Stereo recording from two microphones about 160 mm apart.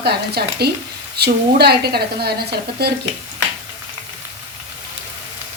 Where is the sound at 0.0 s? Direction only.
90° right.